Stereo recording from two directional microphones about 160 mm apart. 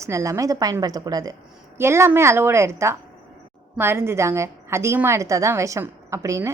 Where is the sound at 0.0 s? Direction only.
20° right (ahead or behind).